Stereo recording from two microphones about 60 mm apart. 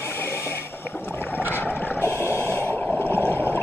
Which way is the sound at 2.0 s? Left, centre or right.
Left.